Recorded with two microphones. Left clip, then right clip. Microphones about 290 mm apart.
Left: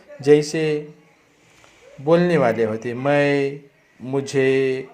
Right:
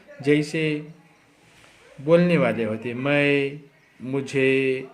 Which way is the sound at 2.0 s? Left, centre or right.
Centre.